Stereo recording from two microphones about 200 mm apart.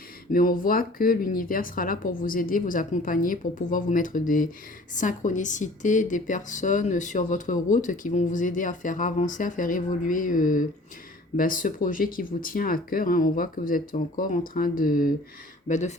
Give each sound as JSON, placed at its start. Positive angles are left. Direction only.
{"t": 0.3, "sound": "speech", "side_deg": 45}